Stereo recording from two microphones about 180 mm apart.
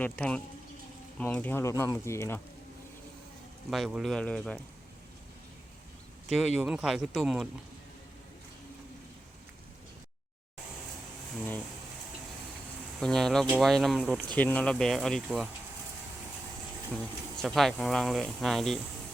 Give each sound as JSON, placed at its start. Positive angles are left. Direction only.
{"t": 0.0, "sound": "speech", "side_deg": 5}
{"t": 3.7, "sound": "speech", "side_deg": 0}
{"t": 6.2, "sound": "speech", "side_deg": 0}
{"t": 13.0, "sound": "speech", "side_deg": 5}
{"t": 16.9, "sound": "speech", "side_deg": 5}